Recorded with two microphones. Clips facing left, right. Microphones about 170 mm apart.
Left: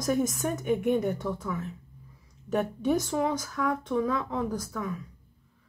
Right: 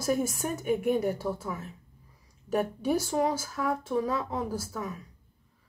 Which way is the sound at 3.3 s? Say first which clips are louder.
Left 1 dB; 30° right (ahead or behind).